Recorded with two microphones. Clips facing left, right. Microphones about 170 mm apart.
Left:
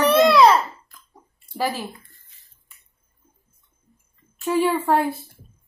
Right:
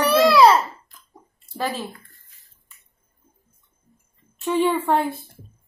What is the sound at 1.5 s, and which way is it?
Laughter, 10° left (ahead or behind).